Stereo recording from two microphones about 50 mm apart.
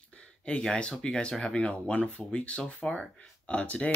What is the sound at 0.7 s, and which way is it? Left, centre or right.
Speech, centre.